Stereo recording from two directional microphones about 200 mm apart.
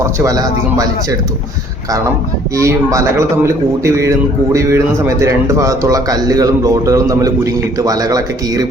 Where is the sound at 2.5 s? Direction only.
15° right (ahead or behind).